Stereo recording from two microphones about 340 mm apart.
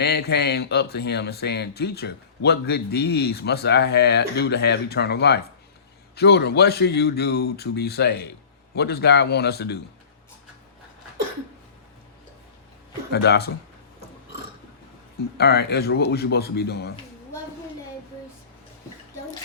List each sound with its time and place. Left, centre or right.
0.0 s speech: left
13.1 s speech: left
15.4 s speech: left